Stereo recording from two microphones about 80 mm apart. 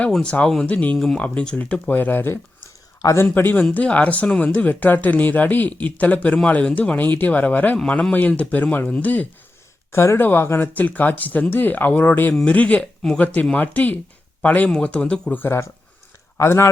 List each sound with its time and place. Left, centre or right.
0.1 s speech: centre; by 2.4 s left
3.5 s speech: centre
9.9 s speech: left; by 15.4 s centre
15.4 s speech: left